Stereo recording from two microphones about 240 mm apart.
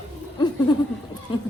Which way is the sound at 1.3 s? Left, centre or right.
Centre.